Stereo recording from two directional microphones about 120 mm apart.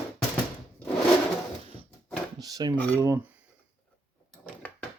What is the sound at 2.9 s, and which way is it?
Speech, 25° right (ahead or behind).